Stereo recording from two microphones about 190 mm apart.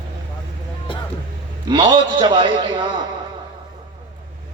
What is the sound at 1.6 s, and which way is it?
Speech, 25° right (ahead or behind).